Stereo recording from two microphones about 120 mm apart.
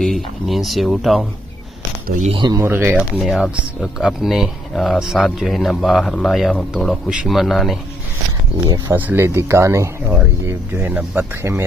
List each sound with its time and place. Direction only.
0.0 s speech: centre (ahead or behind)
2.3 s speech: 35° right (ahead or behind)
2.6 s speech: 20° right (ahead or behind)
3.0 s speech: 5° right (ahead or behind)
8.9 s speech: 15° right (ahead or behind)